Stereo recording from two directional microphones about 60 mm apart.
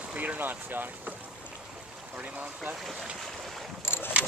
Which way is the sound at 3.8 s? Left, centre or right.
Left.